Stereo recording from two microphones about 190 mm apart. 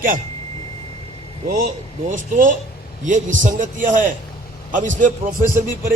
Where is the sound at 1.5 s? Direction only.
45° right (ahead or behind).